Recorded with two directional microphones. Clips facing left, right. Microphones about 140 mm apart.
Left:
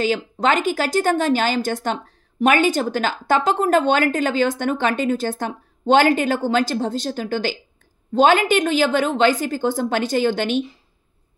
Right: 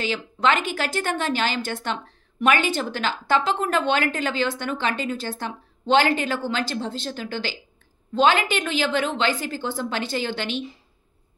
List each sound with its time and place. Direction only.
0.0 s a woman's voice: 40° left (ahead or behind)